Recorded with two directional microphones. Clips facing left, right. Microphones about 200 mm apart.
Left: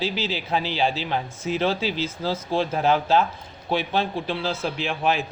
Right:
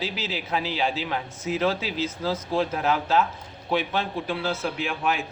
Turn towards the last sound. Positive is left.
turn(degrees=30)  # may be behind; listen again after turning